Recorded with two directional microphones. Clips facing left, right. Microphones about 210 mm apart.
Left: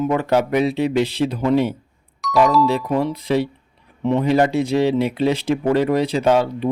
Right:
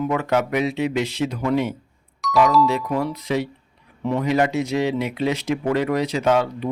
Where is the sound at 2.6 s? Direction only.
30° left (ahead or behind).